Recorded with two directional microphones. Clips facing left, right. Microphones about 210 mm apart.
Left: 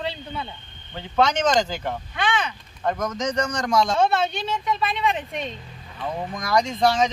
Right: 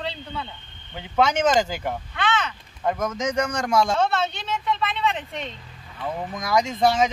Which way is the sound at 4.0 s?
15° left (ahead or behind).